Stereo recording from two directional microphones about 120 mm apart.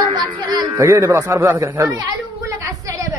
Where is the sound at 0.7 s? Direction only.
25° right (ahead or behind).